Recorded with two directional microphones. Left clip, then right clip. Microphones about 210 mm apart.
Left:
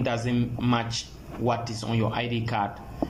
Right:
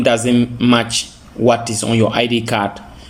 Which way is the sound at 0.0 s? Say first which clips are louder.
Right 14 dB; 55° right (ahead or behind).